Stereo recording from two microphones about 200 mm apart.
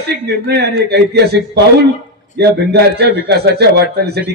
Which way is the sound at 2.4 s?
55° right (ahead or behind).